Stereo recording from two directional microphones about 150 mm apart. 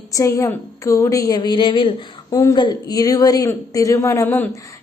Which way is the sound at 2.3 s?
25° left (ahead or behind).